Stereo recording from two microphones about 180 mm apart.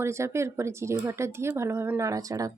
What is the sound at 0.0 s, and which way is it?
Speech, 15° right (ahead or behind).